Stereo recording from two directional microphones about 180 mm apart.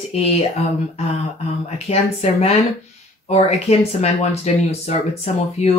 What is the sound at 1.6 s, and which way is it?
Speech, 35° left (ahead or behind).